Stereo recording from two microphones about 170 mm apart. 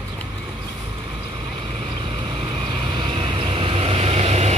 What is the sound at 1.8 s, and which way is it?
Vehicle, 35° right (ahead or behind).